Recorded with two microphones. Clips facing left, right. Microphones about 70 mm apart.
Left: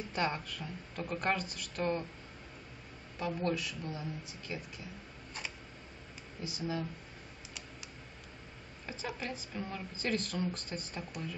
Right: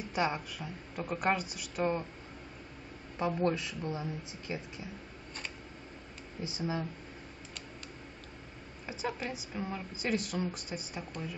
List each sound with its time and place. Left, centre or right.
0.1 s a woman's voice: centre
3.2 s a woman's voice: right
6.4 s a woman's voice: right
8.8 s a woman's voice: centre